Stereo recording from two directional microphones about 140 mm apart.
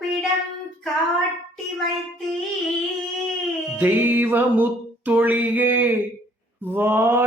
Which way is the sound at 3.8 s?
15° right (ahead or behind).